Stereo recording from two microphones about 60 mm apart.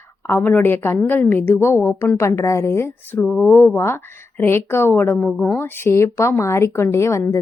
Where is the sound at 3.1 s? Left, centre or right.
Left.